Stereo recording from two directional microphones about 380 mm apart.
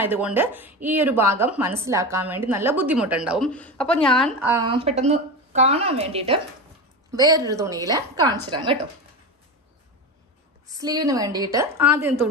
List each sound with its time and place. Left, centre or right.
0.0 s a woman's voice: centre
10.7 s a woman's voice: centre